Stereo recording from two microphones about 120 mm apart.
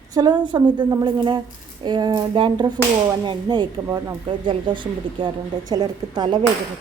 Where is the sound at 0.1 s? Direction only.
35° right (ahead or behind).